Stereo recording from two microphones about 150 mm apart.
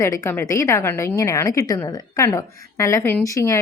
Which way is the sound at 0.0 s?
20° left (ahead or behind).